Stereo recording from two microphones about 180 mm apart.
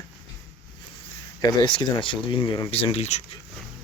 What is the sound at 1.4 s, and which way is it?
Speech, 25° left (ahead or behind).